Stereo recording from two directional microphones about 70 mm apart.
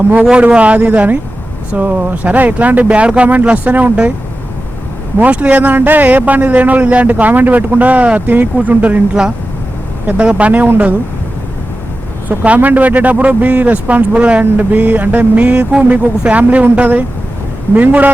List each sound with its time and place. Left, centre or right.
0.3 s speech: centre
5.2 s speech: right
10.1 s speech: centre
12.5 s speech: right